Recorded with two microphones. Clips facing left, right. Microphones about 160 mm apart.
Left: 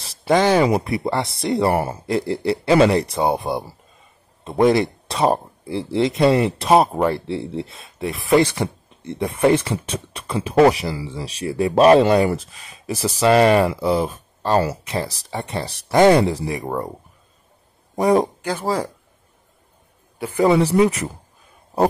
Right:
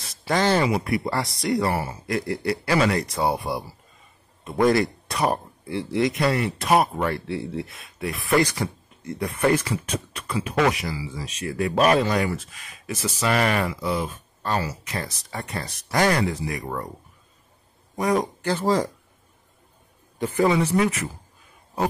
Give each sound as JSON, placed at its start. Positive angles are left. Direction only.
{"t": 0.3, "sound": "speech", "side_deg": 15}
{"t": 1.7, "sound": "speech", "side_deg": 55}
{"t": 2.0, "sound": "speech", "side_deg": 30}
{"t": 17.9, "sound": "speech", "side_deg": 30}
{"t": 18.4, "sound": "speech", "side_deg": 10}
{"t": 20.2, "sound": "a man's voice", "side_deg": 10}
{"t": 20.6, "sound": "speech", "side_deg": 35}